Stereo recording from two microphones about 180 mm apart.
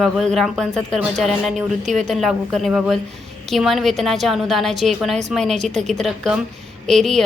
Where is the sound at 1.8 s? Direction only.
40° right (ahead or behind).